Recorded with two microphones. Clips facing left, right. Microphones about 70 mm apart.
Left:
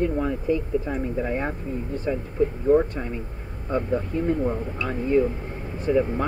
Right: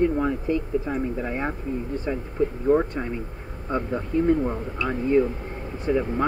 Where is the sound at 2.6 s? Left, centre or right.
Centre.